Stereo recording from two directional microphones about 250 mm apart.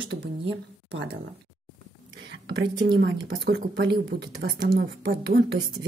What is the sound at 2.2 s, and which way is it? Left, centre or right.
Whispering, right.